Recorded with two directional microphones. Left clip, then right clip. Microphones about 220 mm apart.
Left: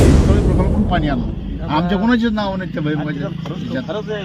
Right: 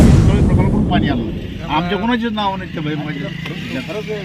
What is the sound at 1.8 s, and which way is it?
A man's voice, 40° left (ahead or behind).